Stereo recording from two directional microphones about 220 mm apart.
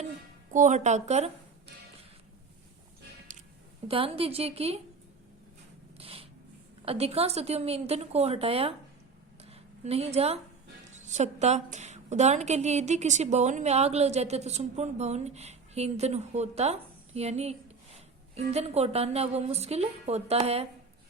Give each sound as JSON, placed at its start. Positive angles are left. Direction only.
{"t": 0.5, "sound": "a woman's voice", "side_deg": -35}
{"t": 3.3, "sound": "squish", "side_deg": -35}
{"t": 3.8, "sound": "a woman's voice", "side_deg": -25}
{"t": 6.0, "sound": "a sound", "side_deg": -25}
{"t": 6.8, "sound": "a woman's voice", "side_deg": -25}
{"t": 9.4, "sound": "a sound", "side_deg": -30}
{"t": 10.9, "sound": "a woman's voice", "side_deg": -30}